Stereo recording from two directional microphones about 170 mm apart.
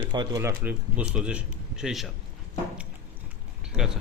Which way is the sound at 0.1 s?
25° right (ahead or behind).